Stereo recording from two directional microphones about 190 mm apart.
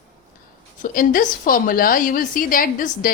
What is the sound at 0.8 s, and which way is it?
A woman's voice, 45° left (ahead or behind).